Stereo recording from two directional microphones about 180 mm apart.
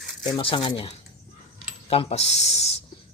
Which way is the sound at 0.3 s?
25° left (ahead or behind).